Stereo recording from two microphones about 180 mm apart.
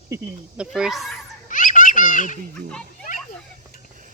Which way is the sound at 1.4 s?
45° left (ahead or behind).